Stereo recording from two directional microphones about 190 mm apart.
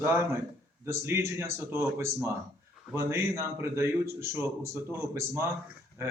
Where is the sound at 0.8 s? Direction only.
15° right (ahead or behind).